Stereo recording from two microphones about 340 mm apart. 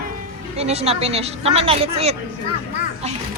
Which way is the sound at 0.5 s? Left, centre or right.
Centre.